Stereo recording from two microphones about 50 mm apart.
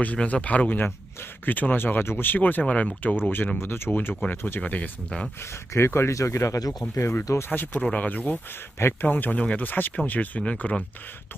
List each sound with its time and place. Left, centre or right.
0.0 s speech: left
2.3 s speech: left
2.6 s speech: left
3.0 s speech: left
4.6 s speech: left
5.7 s speech: left
7.2 s speech: left
7.8 s speech: left
8.1 s speech: left
10.4 s speech: left